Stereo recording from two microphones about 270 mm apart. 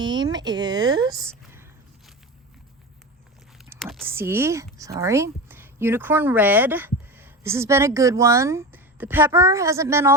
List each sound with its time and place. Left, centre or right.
0.0 s speech: centre
3.7 s speech: centre